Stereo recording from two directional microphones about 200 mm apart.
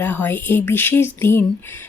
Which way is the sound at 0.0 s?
10° left (ahead or behind).